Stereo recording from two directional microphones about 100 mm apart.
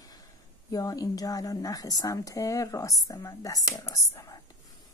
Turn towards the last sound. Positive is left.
turn(degrees=35)  # may be behind; listen again after turning